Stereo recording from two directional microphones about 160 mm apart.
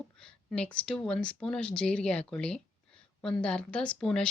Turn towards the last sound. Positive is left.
turn(degrees=5)  # may be behind; listen again after turning